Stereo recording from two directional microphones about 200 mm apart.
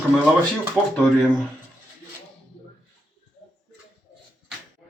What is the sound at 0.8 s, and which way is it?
Speech, 5° right (ahead or behind).